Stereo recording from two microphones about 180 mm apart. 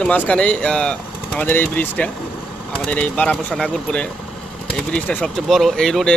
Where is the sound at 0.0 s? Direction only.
5° left (ahead or behind).